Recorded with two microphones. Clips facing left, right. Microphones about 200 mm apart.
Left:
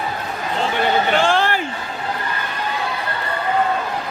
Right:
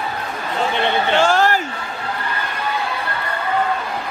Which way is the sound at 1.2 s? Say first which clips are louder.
Right 2 dB; 45° right (ahead or behind).